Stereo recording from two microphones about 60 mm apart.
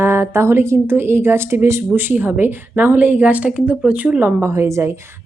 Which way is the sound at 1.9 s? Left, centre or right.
Right.